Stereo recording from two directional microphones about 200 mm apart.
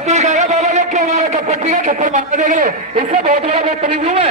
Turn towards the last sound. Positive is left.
turn(degrees=-30)  # may be behind; listen again after turning